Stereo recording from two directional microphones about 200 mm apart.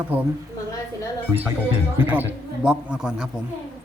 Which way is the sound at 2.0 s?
10° right (ahead or behind).